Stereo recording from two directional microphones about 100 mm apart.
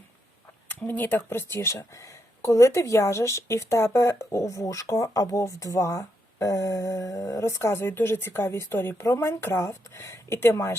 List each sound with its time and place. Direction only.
0.7 s speech: 15° left (ahead or behind)